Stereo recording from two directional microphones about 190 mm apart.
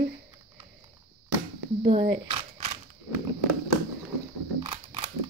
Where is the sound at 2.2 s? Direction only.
30° right (ahead or behind).